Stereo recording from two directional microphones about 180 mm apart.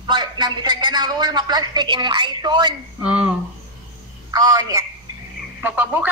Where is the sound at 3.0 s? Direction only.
5° right (ahead or behind).